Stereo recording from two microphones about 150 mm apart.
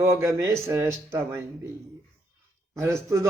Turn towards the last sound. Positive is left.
turn(degrees=-20)  # may be behind; listen again after turning